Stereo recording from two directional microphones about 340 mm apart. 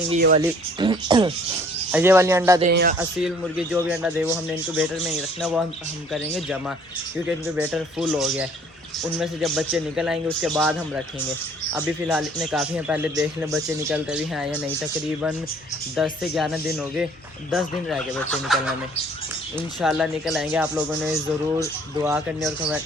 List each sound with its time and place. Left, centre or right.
0.1 s speech: right
2.6 s speech: right
3.2 s a man's voice: centre